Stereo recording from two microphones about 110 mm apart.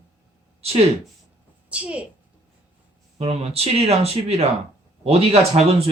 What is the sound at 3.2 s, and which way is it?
Speech, 70° right (ahead or behind).